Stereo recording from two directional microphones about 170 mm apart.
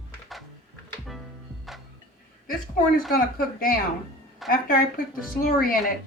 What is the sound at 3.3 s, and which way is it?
Speech, 55° left (ahead or behind).